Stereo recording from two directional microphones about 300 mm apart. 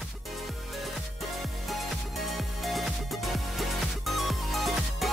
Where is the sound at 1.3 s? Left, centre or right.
Centre.